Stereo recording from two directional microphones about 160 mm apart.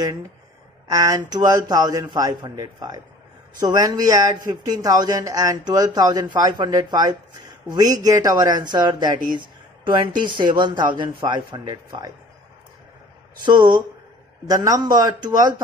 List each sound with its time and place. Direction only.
0.0 s speech: 20° right (ahead or behind)
13.5 s speech: 25° right (ahead or behind)